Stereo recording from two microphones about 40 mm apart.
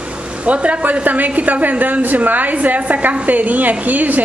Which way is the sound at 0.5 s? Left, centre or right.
Right.